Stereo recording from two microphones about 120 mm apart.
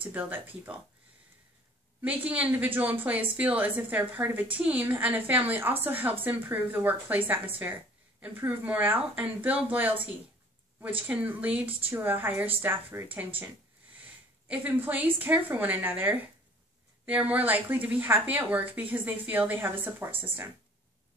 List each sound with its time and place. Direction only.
0.0 s a woman's voice: 15° right (ahead or behind)
2.0 s a woman's voice: 10° right (ahead or behind)